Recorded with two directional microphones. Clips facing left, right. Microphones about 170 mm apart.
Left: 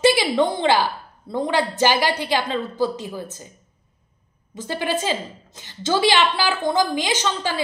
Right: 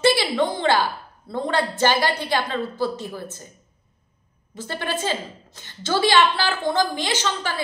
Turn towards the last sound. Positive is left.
turn(degrees=15)  # may be behind; listen again after turning